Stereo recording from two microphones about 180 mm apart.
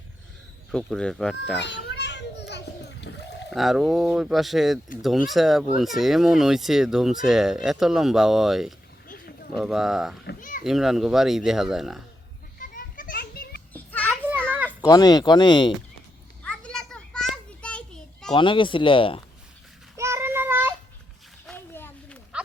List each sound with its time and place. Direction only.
0.7 s speech: 5° left (ahead or behind)
1.5 s children playing: 75° left (ahead or behind)
3.5 s speech: centre (ahead or behind)
9.0 s a sound: 55° left (ahead or behind)
9.6 s speech: centre (ahead or behind)
12.5 s children playing: 50° left (ahead or behind)
13.7 s children playing: 10° left (ahead or behind)
14.8 s speech: 20° left (ahead or behind)
16.4 s children playing: 5° left (ahead or behind)
18.3 s speech: 25° left (ahead or behind)
20.0 s child singing: 15° right (ahead or behind)
21.4 s a sound: 10° left (ahead or behind)